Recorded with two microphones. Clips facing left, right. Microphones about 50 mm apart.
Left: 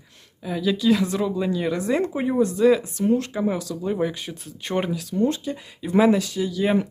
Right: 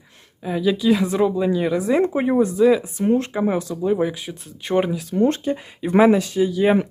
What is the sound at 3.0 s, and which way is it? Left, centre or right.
Speech, right.